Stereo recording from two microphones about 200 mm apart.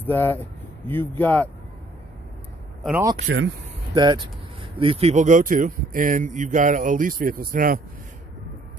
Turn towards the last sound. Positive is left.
turn(degrees=-45)  # may be behind; listen again after turning